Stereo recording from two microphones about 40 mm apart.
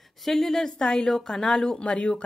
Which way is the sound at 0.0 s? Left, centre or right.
Centre.